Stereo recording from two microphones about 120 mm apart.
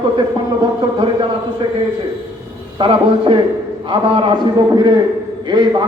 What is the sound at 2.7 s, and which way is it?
A man's voice, 40° right (ahead or behind).